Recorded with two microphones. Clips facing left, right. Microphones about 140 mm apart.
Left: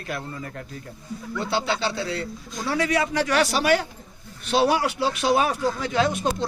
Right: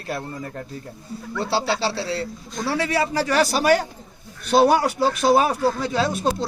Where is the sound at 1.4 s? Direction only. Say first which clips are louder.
Right 3 dB; 35° right (ahead or behind).